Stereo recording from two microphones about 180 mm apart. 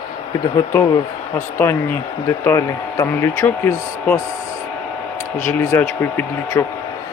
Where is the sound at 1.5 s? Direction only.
15° left (ahead or behind).